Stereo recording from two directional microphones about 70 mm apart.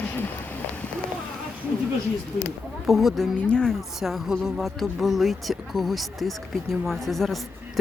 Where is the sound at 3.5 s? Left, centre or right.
Centre.